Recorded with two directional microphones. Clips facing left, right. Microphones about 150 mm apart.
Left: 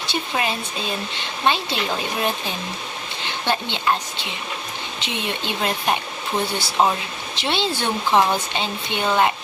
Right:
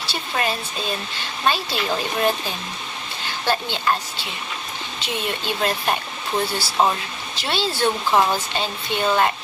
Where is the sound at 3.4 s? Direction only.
20° left (ahead or behind).